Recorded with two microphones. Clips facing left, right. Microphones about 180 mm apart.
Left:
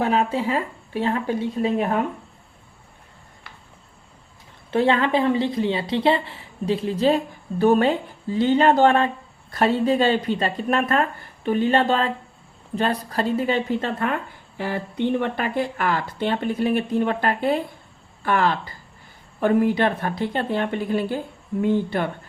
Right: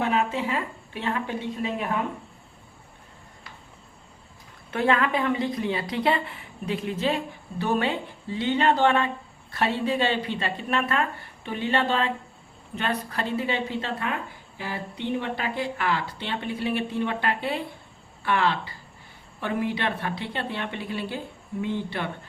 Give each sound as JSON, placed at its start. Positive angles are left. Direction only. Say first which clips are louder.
{"t": 0.0, "sound": "speech", "louder": "left 4 dB", "side_deg": 35}
{"t": 4.7, "sound": "a woman's voice", "louder": "left 4 dB", "side_deg": 30}